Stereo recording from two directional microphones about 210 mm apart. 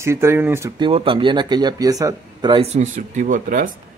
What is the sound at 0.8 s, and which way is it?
Speech, 25° right (ahead or behind).